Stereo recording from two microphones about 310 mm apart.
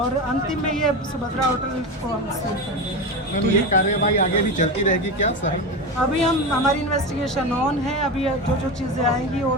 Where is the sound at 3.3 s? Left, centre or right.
Left.